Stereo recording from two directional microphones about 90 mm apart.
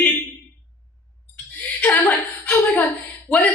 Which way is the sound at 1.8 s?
20° left (ahead or behind).